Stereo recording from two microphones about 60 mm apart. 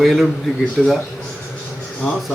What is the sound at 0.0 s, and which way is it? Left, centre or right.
Speech, centre.